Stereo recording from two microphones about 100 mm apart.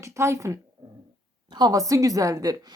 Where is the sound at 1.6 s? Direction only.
35° right (ahead or behind).